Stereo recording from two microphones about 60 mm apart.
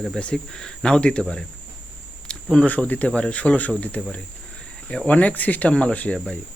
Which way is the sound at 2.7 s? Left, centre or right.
Left.